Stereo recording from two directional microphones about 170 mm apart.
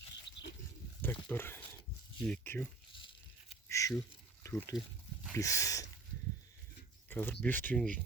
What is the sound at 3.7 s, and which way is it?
Duck, 20° left (ahead or behind).